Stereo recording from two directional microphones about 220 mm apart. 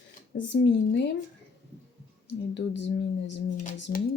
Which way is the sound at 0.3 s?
50° left (ahead or behind).